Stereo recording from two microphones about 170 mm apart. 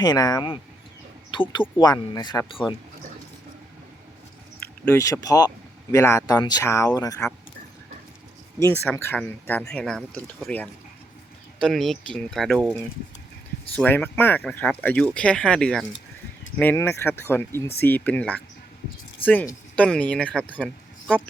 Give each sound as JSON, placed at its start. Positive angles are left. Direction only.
{"t": 0.0, "sound": "speech", "side_deg": 20}
{"t": 4.9, "sound": "speech", "side_deg": 15}
{"t": 8.5, "sound": "speech", "side_deg": 15}
{"t": 13.7, "sound": "a man's voice", "side_deg": 10}